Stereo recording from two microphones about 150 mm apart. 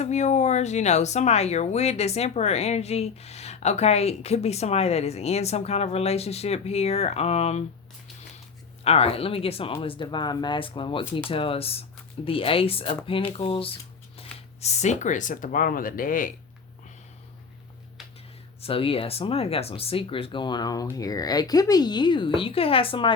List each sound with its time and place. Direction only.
0.0 s speech: 50° left (ahead or behind)
8.8 s speech: 40° left (ahead or behind)
14.2 s a sound: 40° left (ahead or behind)
14.6 s speech: 50° left (ahead or behind); by 16.3 s 65° left (ahead or behind)
18.6 s a woman's voice: 40° left (ahead or behind)